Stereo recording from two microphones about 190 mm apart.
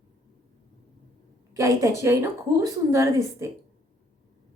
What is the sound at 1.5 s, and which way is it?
Speech, 15° right (ahead or behind).